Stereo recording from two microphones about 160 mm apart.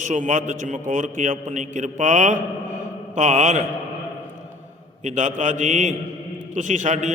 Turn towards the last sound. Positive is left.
turn(degrees=-50)  # may be behind; listen again after turning